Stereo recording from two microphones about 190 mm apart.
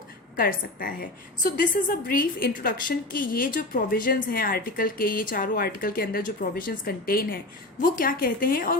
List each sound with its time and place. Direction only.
0.3 s a woman's voice: 50° left (ahead or behind)